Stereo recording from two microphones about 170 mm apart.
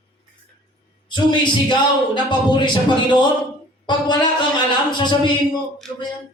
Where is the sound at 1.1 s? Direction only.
25° left (ahead or behind).